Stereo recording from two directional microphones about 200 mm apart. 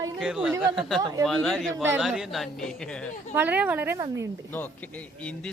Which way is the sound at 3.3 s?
10° right (ahead or behind).